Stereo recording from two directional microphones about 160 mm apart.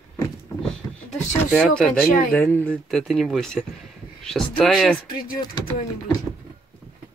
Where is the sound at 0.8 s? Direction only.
20° left (ahead or behind).